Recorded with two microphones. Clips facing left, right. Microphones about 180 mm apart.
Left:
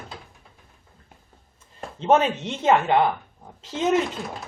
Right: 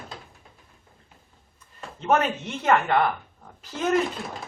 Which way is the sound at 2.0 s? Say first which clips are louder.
Left 3 dB; 25° left (ahead or behind).